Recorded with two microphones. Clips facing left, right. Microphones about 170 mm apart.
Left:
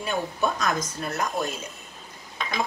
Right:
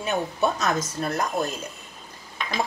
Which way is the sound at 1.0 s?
35° right (ahead or behind).